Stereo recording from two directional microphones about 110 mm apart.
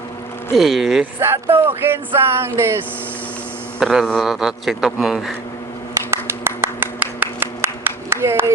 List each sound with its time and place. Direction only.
0.5 s a man's voice: centre (ahead or behind)
1.2 s music: 20° right (ahead or behind)
3.8 s a man's voice: centre (ahead or behind)
6.1 s a sound: 20° right (ahead or behind)